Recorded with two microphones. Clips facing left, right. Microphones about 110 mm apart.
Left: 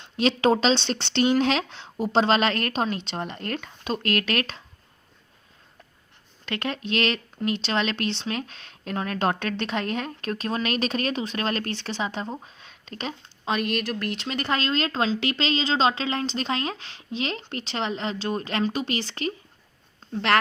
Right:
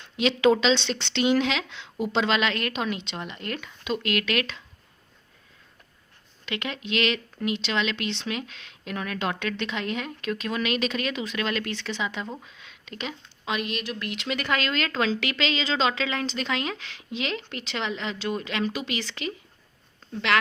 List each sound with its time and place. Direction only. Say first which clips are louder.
0.2 s speech: even; 40° left (ahead or behind)
6.4 s speech: left 3 dB; 40° left (ahead or behind)